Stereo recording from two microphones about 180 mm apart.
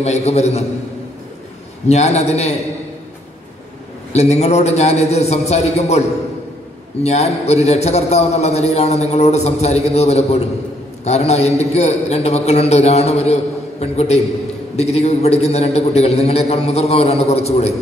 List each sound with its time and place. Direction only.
0.0 s a man's voice: 35° left (ahead or behind)
1.9 s a man's voice: 35° left (ahead or behind)
4.1 s a man's voice: 35° left (ahead or behind)